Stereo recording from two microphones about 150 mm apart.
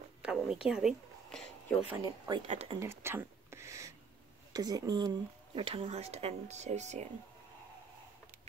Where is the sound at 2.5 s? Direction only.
45° right (ahead or behind).